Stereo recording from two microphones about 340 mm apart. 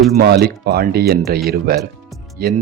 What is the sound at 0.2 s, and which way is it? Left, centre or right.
Speech, right.